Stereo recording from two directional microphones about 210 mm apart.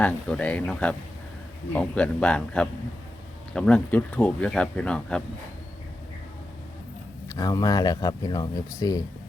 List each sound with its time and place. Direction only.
0.0 s speech: 5° left (ahead or behind)
7.3 s speech: 15° left (ahead or behind)